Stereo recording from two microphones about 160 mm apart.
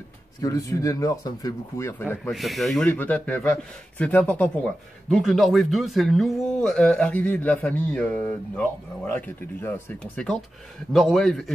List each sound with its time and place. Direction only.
0.4 s speech: 20° left (ahead or behind)
2.3 s a man's voice: centre (ahead or behind)